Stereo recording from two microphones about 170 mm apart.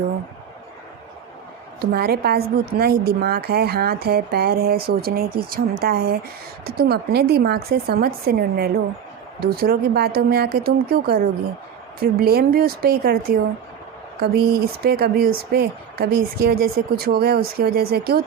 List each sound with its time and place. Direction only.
1.8 s speech: 65° right (ahead or behind)